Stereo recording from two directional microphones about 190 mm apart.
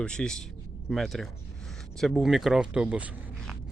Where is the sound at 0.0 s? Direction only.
5° left (ahead or behind).